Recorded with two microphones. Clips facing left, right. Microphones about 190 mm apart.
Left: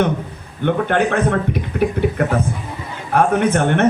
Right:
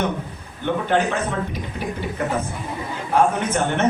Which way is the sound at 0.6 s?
60° left (ahead or behind).